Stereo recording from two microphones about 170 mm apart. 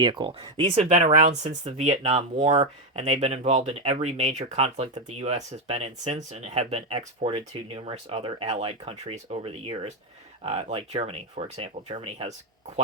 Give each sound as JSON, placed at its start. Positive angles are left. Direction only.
{"t": 0.0, "sound": "speech", "side_deg": -30}